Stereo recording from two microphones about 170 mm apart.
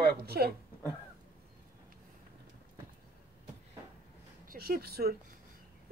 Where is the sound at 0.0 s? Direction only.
65° right (ahead or behind).